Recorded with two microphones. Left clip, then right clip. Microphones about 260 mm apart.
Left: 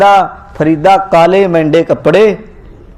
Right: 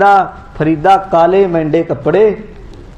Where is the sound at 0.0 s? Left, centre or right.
Left.